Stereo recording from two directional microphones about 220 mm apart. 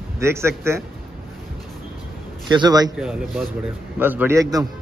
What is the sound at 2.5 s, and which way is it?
Speech, 20° right (ahead or behind).